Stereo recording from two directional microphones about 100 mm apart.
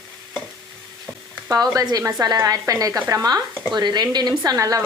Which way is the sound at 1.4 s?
40° right (ahead or behind).